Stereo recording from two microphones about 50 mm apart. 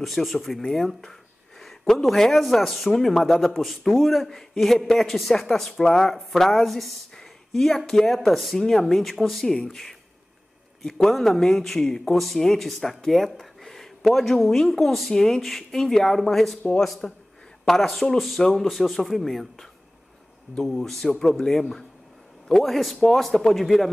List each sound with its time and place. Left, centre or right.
0.0 s a man's voice: centre
17.0 s a man's voice: centre
17.6 s a man's voice: centre
20.7 s a man's voice: centre